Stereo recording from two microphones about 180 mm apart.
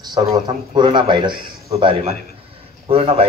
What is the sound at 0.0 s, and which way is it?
A man's voice, 20° right (ahead or behind).